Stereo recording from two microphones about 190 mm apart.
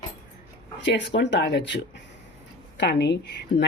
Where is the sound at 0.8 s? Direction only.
65° left (ahead or behind).